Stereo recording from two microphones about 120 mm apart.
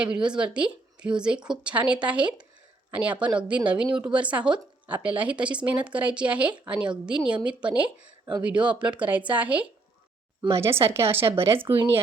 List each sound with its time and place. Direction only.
0.0 s a woman's voice: 10° right (ahead or behind)